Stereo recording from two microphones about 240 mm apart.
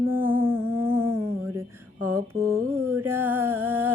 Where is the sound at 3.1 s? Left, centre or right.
Centre.